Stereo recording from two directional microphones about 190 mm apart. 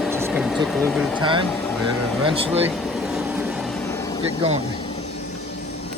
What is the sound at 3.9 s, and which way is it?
Vehicle, 15° left (ahead or behind).